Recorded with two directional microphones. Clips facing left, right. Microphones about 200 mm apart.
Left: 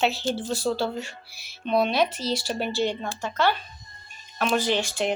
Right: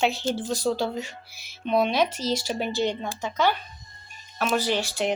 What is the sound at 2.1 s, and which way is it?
Speech, 45° right (ahead or behind).